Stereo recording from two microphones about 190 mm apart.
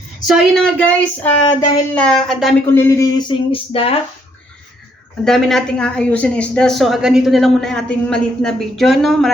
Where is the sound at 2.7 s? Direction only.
15° left (ahead or behind).